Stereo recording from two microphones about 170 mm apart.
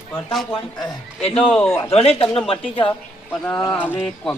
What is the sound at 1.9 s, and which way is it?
Speech, 35° left (ahead or behind).